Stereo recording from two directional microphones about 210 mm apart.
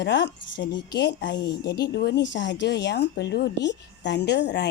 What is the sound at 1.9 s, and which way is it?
Speech, 50° left (ahead or behind).